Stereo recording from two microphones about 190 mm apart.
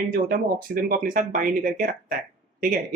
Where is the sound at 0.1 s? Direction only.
50° right (ahead or behind).